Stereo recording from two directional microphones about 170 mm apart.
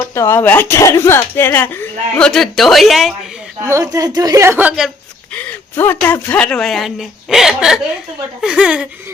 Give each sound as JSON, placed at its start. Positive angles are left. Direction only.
{"t": 0.0, "sound": "speech", "side_deg": 15}
{"t": 3.6, "sound": "a woman's voice", "side_deg": -20}
{"t": 5.3, "sound": "speech", "side_deg": 10}